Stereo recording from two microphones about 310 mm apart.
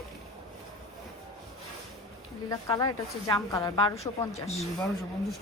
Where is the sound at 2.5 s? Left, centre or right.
Centre.